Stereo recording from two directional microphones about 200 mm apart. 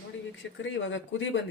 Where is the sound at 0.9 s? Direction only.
70° left (ahead or behind).